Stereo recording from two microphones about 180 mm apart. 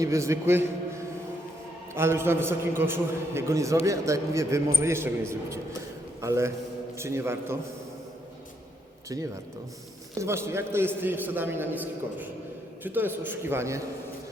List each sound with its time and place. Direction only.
0.0 s a man's voice: 15° right (ahead or behind)
9.0 s a man's voice: 15° right (ahead or behind)